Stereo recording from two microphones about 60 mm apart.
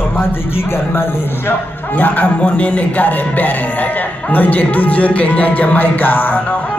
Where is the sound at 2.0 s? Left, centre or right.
Left.